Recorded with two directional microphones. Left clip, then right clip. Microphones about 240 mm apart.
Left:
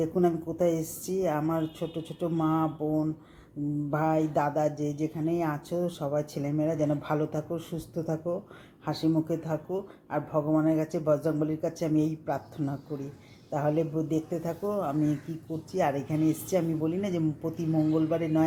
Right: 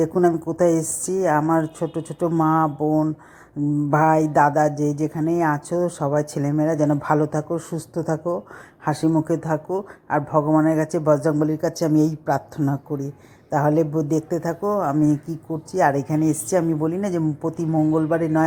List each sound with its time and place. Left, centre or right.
0.0 s a woman's voice: right